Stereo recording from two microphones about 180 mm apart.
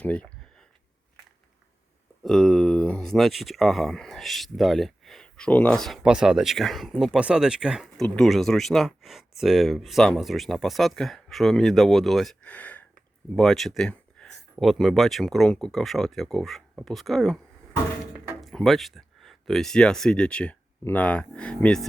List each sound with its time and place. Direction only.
0.0 s speech: 5° left (ahead or behind)
2.2 s speech: centre (ahead or behind)